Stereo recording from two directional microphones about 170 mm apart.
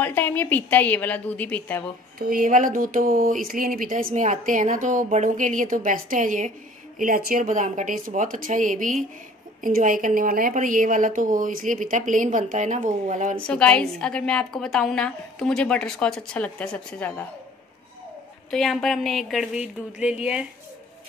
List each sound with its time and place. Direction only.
0.0 s a woman's voice: 10° left (ahead or behind)
2.1 s speech: 55° right (ahead or behind)
13.5 s a woman's voice: 5° left (ahead or behind)
18.5 s a woman's voice: centre (ahead or behind)